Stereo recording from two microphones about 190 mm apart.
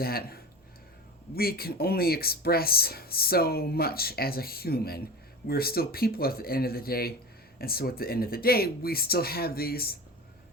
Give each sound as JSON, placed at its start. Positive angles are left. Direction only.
{"t": 0.0, "sound": "speech", "side_deg": 55}
{"t": 1.4, "sound": "speech", "side_deg": 55}